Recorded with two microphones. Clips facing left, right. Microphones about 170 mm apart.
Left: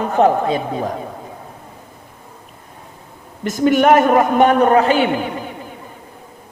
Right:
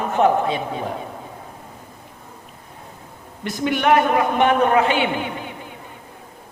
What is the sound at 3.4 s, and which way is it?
A woman's voice, 45° left (ahead or behind).